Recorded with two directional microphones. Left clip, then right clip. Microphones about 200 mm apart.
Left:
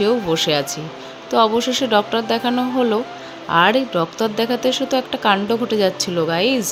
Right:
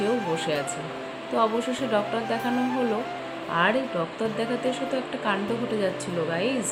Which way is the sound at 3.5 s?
55° left (ahead or behind).